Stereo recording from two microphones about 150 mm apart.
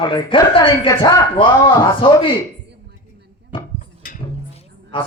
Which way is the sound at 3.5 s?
35° left (ahead or behind).